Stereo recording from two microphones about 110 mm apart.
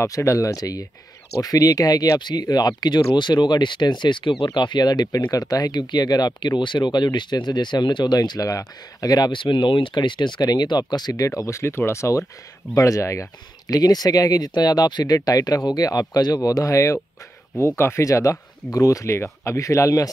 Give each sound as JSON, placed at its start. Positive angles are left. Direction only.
{"t": 0.0, "sound": "speech", "side_deg": 25}